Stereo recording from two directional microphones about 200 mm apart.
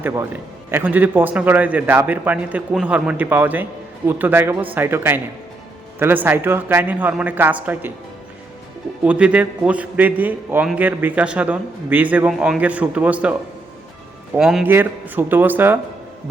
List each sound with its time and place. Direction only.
0.0 s a man's voice: 15° right (ahead or behind)
9.0 s a man's voice: 5° right (ahead or behind)
14.3 s a man's voice: 5° right (ahead or behind)